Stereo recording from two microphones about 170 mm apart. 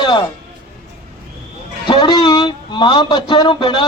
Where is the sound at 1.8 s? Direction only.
25° left (ahead or behind).